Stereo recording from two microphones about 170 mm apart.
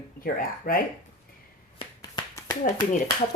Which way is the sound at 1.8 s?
25° left (ahead or behind).